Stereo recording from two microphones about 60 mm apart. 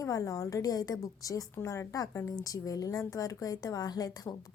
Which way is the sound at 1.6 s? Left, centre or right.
Left.